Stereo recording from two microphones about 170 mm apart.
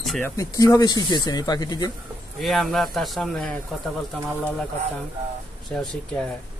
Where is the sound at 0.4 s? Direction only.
20° left (ahead or behind).